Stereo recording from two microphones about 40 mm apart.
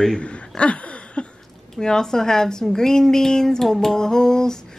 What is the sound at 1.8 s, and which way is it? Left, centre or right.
Speech, centre.